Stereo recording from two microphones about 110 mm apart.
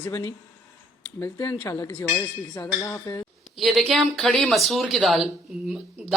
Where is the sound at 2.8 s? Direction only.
30° left (ahead or behind).